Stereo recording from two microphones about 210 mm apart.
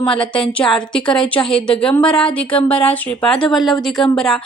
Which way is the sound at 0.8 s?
20° left (ahead or behind).